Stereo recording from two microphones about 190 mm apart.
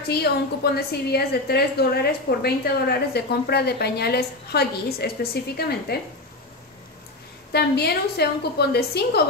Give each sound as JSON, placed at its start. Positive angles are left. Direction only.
{"t": 0.7, "sound": "a woman's voice", "side_deg": 55}
{"t": 7.5, "sound": "a woman's voice", "side_deg": 60}